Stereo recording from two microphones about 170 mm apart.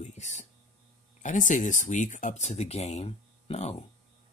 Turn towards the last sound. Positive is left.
turn(degrees=35)  # may be behind; listen again after turning